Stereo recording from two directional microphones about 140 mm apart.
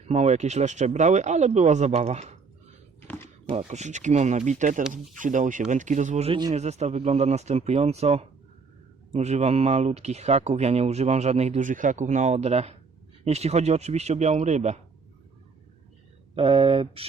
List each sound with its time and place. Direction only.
0.0 s speech: 50° right (ahead or behind)
3.6 s speech: 55° right (ahead or behind)
16.3 s speech: 40° right (ahead or behind)